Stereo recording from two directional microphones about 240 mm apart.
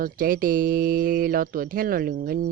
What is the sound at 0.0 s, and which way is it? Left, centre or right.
Speech, right.